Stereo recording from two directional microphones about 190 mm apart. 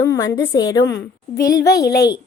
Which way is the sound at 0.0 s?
20° left (ahead or behind).